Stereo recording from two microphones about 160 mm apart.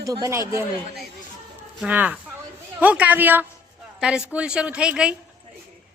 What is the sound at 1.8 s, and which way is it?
A woman's voice, 10° right (ahead or behind).